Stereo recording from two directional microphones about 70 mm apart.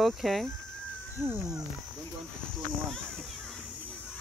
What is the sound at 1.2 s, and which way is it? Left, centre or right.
Speech, right.